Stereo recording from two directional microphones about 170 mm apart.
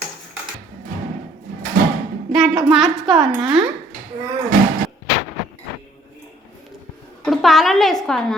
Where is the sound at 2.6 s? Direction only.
Centre (ahead or behind).